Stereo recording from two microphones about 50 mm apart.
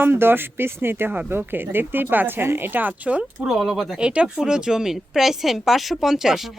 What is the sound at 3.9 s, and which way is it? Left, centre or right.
Speech, right.